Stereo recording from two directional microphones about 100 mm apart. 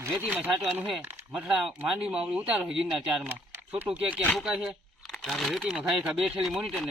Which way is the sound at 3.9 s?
10° right (ahead or behind).